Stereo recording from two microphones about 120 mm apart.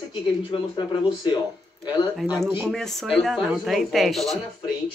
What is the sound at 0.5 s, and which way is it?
Speech, 45° left (ahead or behind).